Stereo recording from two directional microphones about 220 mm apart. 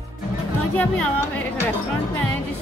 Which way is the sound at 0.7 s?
5° left (ahead or behind).